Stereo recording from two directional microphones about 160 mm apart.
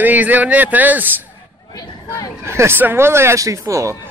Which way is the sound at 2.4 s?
15° right (ahead or behind).